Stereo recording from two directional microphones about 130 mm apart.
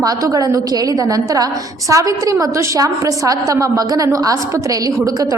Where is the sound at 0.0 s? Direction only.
25° right (ahead or behind).